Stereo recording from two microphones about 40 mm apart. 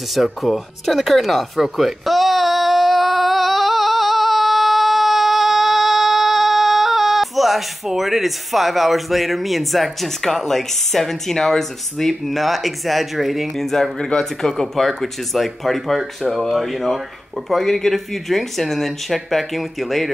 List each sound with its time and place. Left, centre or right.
0.1 s a sound: centre
10.2 s speech: centre
13.6 s speech: centre
14.8 s speech: centre